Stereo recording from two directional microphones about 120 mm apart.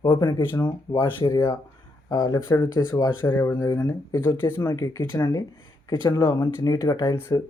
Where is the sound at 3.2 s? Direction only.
15° left (ahead or behind).